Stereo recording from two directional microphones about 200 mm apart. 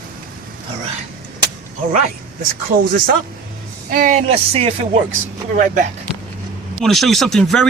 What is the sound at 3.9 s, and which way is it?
Speech, 40° right (ahead or behind).